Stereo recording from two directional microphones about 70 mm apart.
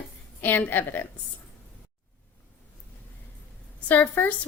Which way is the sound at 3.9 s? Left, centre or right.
Left.